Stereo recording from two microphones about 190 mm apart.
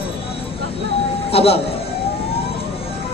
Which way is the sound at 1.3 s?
30° left (ahead or behind).